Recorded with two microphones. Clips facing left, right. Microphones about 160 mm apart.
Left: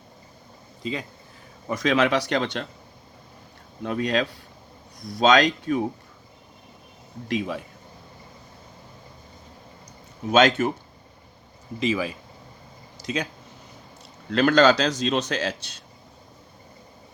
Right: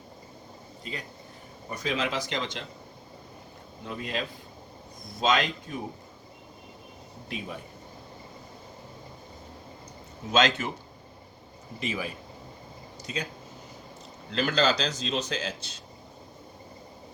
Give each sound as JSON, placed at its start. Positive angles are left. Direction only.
{"t": 1.6, "sound": "a man's voice", "side_deg": 90}
{"t": 3.8, "sound": "a man's voice", "side_deg": 75}
{"t": 7.3, "sound": "speech", "side_deg": 90}
{"t": 10.3, "sound": "speech", "side_deg": 60}
{"t": 11.8, "sound": "speech", "side_deg": 90}
{"t": 13.0, "sound": "a sound", "side_deg": 90}
{"t": 14.3, "sound": "a man's voice", "side_deg": 60}